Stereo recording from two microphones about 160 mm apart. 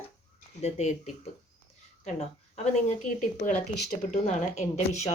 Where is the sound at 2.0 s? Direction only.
45° left (ahead or behind).